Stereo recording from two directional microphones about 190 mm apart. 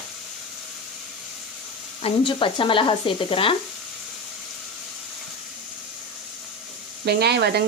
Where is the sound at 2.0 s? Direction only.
25° left (ahead or behind).